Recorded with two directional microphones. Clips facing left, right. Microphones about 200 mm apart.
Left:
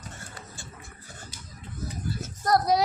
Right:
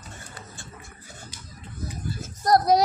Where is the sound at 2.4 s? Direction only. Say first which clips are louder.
Right 4 dB; 40° right (ahead or behind).